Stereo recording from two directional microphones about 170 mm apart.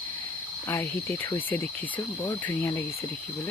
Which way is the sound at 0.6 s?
15° left (ahead or behind).